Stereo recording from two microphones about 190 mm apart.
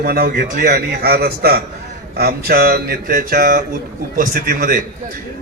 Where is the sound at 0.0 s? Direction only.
55° right (ahead or behind).